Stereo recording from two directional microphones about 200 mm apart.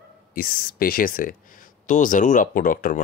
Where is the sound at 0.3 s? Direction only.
45° left (ahead or behind).